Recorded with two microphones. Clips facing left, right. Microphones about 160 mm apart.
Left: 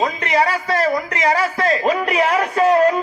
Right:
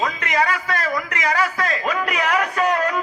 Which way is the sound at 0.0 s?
30° left (ahead or behind).